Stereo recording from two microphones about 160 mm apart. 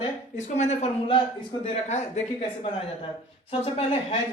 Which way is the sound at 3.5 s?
40° left (ahead or behind).